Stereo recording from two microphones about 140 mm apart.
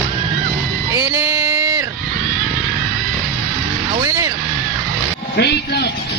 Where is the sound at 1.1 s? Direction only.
20° right (ahead or behind).